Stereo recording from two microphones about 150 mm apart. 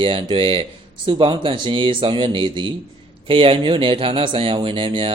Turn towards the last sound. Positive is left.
turn(degrees=-35)  # may be behind; listen again after turning